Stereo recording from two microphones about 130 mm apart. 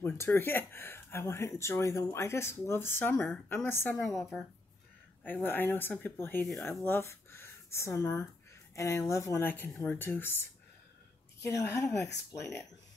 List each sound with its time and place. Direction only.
0.0 s speech: 20° left (ahead or behind)
3.9 s speech: centre (ahead or behind)
5.2 s speech: 15° left (ahead or behind)